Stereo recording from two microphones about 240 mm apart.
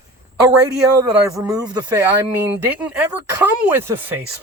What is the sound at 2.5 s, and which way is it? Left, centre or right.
Speech, centre.